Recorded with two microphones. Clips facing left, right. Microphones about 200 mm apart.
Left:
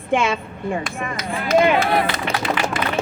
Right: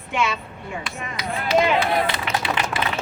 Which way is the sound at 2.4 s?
45° left (ahead or behind).